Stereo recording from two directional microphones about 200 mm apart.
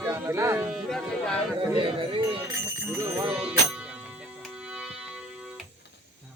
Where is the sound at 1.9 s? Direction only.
25° right (ahead or behind).